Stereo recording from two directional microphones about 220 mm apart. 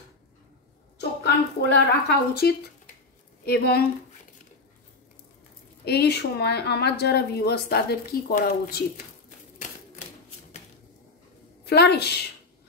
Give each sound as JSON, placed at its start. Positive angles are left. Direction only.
{"t": 0.9, "sound": "a woman's voice", "side_deg": 50}
{"t": 5.9, "sound": "a woman's voice", "side_deg": 50}
{"t": 11.6, "sound": "a woman's voice", "side_deg": 50}